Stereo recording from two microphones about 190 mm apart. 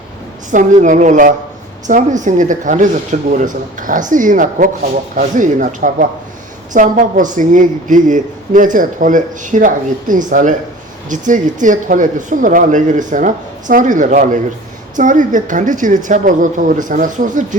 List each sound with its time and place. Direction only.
0.5 s speech: 40° right (ahead or behind)